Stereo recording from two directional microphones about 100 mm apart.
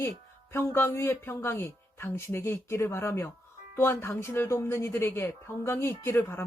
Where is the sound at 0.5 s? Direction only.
25° left (ahead or behind).